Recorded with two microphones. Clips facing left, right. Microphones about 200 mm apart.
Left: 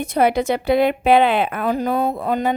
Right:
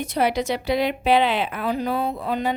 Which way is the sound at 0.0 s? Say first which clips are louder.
Left 4 dB; 50° left (ahead or behind).